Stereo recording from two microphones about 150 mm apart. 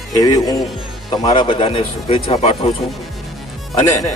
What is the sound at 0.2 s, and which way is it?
A man's voice, 25° left (ahead or behind).